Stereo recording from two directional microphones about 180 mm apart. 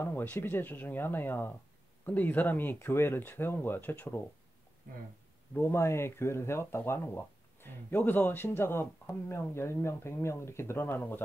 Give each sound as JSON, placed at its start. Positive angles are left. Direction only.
{"t": 0.0, "sound": "speech", "side_deg": 10}
{"t": 4.9, "sound": "speech", "side_deg": -50}
{"t": 5.5, "sound": "speech", "side_deg": 15}